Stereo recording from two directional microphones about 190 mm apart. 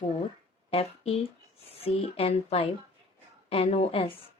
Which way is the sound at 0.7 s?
30° left (ahead or behind).